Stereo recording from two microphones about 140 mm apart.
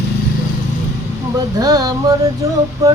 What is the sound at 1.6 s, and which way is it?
Music, 25° right (ahead or behind).